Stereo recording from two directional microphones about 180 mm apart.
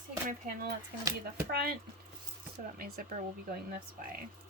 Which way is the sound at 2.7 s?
55° right (ahead or behind).